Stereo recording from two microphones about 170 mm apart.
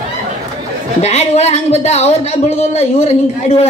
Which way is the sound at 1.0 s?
40° left (ahead or behind).